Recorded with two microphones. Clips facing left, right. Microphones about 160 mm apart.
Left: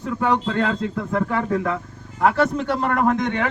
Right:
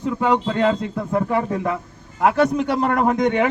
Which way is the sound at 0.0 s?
15° right (ahead or behind).